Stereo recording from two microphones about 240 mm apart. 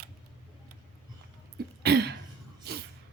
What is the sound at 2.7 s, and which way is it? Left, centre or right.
Music, right.